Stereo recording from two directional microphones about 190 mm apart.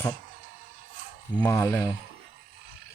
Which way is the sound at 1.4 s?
20° left (ahead or behind).